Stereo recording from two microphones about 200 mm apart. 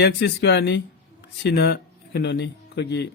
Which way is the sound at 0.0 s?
55° left (ahead or behind).